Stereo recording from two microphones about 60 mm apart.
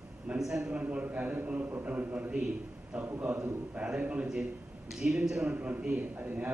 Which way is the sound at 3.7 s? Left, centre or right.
Right.